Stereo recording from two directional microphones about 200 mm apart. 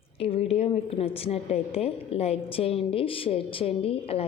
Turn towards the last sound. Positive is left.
turn(degrees=30)  # may be behind; listen again after turning